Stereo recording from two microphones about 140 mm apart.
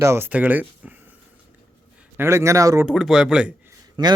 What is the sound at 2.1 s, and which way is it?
Speech, 20° right (ahead or behind).